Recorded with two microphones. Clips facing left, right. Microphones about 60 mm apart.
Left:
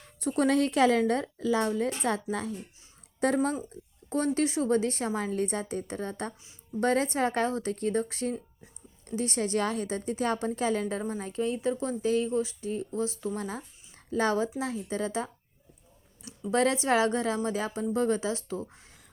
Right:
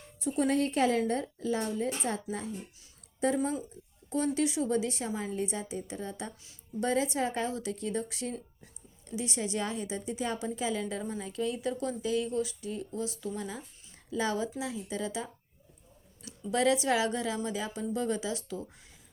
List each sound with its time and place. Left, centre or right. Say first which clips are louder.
0.2 s a woman's voice: left 3 dB; left
1.7 s a woman's voice: left 4 dB; left
4.4 s a woman's voice: left 3 dB; left
13.6 s a sound: left 2 dB; left
14.2 s a woman's voice: left 4 dB; left
16.5 s a woman's voice: left 2 dB; left